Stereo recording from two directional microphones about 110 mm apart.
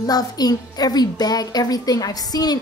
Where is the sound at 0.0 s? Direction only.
35° left (ahead or behind).